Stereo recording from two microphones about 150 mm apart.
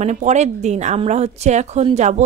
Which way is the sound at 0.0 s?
50° right (ahead or behind).